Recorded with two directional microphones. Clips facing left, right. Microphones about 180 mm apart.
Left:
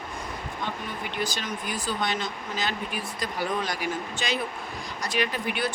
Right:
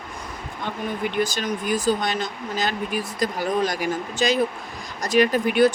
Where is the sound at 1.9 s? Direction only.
45° right (ahead or behind).